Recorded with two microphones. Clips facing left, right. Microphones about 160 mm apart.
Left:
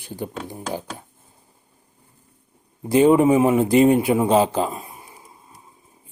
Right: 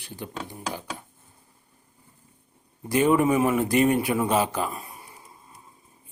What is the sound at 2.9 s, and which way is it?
A man's voice, 25° left (ahead or behind).